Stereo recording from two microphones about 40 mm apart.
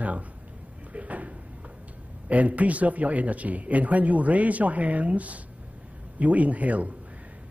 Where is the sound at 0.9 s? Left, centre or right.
Right.